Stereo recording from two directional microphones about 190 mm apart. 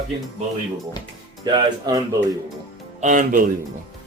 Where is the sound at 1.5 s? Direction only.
20° right (ahead or behind).